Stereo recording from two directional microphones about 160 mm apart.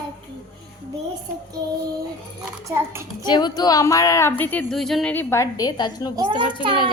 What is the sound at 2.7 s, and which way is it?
Speech, 15° right (ahead or behind).